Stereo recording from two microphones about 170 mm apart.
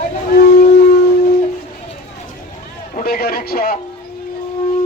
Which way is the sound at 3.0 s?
60° left (ahead or behind).